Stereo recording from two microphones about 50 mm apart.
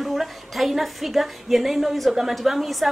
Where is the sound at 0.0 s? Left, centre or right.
Centre.